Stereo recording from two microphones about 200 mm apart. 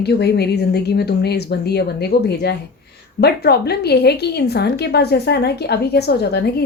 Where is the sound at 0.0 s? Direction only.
55° left (ahead or behind).